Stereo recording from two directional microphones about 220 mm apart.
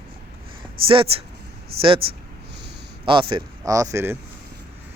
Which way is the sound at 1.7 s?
45° right (ahead or behind).